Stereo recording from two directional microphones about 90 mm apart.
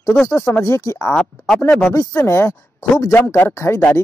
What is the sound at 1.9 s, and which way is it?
Speech, 35° left (ahead or behind).